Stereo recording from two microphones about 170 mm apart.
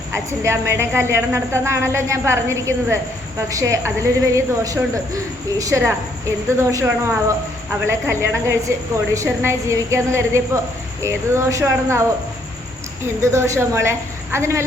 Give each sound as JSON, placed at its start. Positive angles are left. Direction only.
{"t": 0.1, "sound": "a woman's voice", "side_deg": -15}
{"t": 13.2, "sound": "a woman's voice", "side_deg": -15}